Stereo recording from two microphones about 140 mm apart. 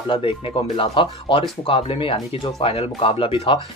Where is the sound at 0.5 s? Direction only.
40° left (ahead or behind).